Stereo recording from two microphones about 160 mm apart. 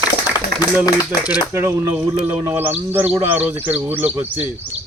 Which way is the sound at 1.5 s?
20° right (ahead or behind).